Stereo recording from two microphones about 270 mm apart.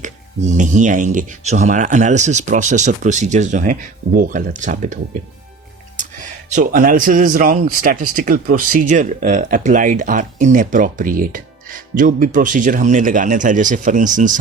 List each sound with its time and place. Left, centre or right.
0.0 s speech: right
6.5 s speech: right